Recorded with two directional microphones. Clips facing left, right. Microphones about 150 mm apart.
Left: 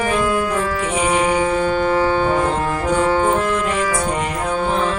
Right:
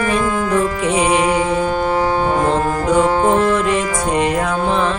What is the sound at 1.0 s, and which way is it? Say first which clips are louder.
Music: even; 20° right (ahead or behind).